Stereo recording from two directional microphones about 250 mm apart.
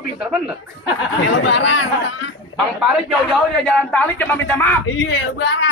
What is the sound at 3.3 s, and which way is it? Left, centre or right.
A man's voice, centre.